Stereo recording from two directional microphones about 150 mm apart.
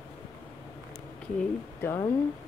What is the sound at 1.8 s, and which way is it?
Speech, 15° left (ahead or behind).